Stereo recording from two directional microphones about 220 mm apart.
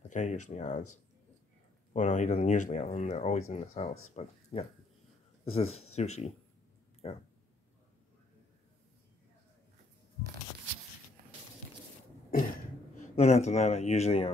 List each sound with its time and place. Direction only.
0.1 s speech: 35° left (ahead or behind)
2.0 s speech: 30° left (ahead or behind)
12.3 s cough: 40° left (ahead or behind)
13.1 s speech: 30° left (ahead or behind)